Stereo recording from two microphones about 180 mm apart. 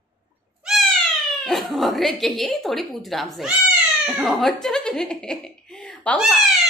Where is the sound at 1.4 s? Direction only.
Centre (ahead or behind).